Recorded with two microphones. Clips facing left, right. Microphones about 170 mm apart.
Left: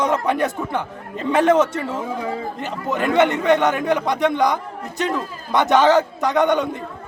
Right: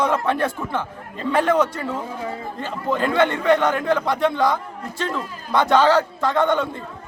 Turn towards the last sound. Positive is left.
turn(degrees=20)  # may be behind; listen again after turning